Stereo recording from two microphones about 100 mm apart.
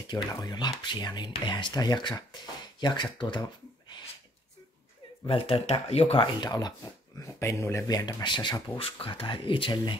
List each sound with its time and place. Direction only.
0.1 s speech: 45° left (ahead or behind)
5.2 s speech: 65° left (ahead or behind); by 6.2 s 90° left
6.2 s speech: 45° left (ahead or behind)
7.3 s speech: 25° left (ahead or behind)
7.9 s speech: 40° left (ahead or behind)
8.7 s speech: 65° left (ahead or behind)